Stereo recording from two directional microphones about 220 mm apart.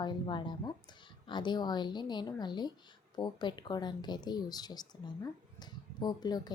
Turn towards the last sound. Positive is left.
turn(degrees=20)  # may be behind; listen again after turning